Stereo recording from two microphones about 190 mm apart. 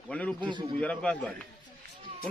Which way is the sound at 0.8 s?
5° left (ahead or behind).